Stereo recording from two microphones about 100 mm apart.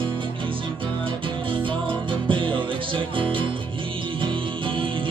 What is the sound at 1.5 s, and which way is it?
Music, 60° right (ahead or behind).